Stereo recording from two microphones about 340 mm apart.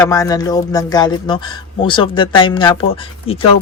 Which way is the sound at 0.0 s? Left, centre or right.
Centre.